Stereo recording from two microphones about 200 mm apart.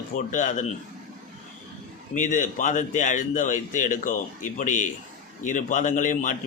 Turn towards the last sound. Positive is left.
turn(degrees=40)  # may be behind; listen again after turning